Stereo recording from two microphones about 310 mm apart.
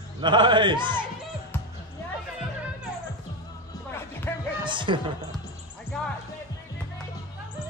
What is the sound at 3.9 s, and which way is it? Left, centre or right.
Music, centre.